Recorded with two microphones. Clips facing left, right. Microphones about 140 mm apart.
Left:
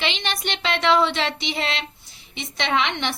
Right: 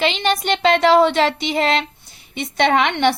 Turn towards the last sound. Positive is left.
turn(degrees=-55)  # may be behind; listen again after turning